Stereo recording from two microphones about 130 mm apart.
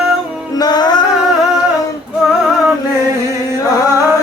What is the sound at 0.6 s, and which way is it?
Music, 30° left (ahead or behind).